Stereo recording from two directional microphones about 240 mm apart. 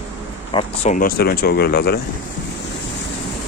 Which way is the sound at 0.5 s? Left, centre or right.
Left.